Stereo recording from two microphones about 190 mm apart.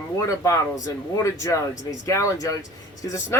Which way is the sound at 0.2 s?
15° left (ahead or behind).